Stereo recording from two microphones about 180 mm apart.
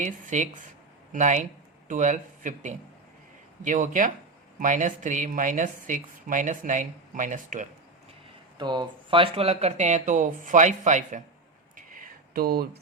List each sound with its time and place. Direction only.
0.0 s speech: 45° right (ahead or behind)
8.5 s speech: 25° right (ahead or behind); by 11.2 s 45° right (ahead or behind)
11.8 s a sound: 50° right (ahead or behind)